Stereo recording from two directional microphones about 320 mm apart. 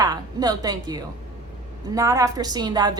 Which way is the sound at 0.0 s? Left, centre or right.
Centre.